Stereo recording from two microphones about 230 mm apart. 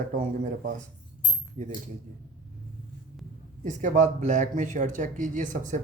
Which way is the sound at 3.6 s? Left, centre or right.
Right.